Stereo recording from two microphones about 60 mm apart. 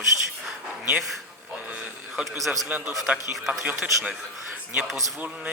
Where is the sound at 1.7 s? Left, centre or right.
Right.